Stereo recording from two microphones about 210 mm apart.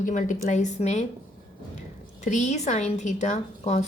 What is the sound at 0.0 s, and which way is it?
A woman's voice, 40° left (ahead or behind).